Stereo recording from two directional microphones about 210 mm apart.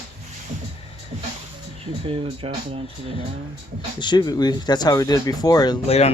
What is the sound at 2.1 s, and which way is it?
Speech, 25° right (ahead or behind).